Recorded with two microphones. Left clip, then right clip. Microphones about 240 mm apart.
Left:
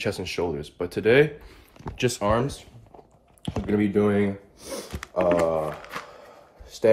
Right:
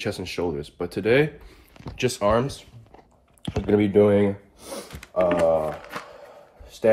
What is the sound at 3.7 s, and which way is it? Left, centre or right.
Speech, centre.